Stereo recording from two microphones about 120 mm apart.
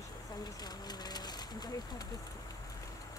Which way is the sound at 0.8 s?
35° left (ahead or behind).